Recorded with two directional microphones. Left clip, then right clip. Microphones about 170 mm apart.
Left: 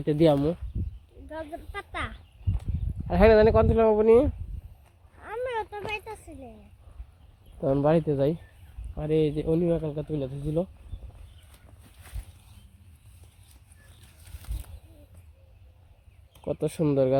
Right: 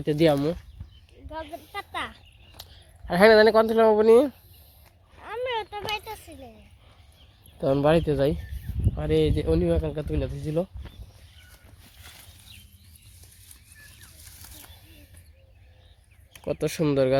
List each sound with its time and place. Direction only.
0.0 s speech: 10° left (ahead or behind)
1.3 s a sound: 65° left (ahead or behind)
3.1 s speech: 5° right (ahead or behind)
5.2 s a sound: 50° left (ahead or behind)
7.6 s speech: centre (ahead or behind)
16.4 s speech: 5° left (ahead or behind)